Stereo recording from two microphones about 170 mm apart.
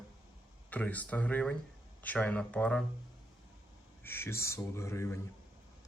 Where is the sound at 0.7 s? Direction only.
10° left (ahead or behind).